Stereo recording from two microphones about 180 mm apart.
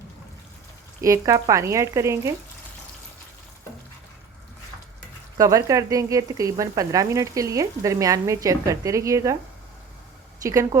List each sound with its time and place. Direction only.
1.0 s speech: 20° right (ahead or behind)
5.4 s speech: 20° right (ahead or behind)
10.4 s speech: 20° right (ahead or behind)